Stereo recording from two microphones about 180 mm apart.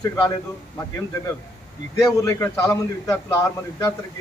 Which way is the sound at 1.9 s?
15° left (ahead or behind).